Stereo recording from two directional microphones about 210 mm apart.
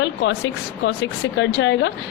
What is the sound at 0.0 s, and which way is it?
A woman's voice, 60° left (ahead or behind).